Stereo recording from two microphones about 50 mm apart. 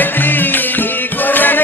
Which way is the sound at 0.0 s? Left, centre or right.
Left.